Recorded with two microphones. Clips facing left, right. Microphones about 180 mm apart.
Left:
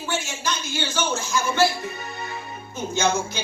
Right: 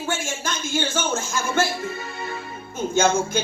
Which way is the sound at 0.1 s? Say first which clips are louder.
Left 1 dB; 50° right (ahead or behind).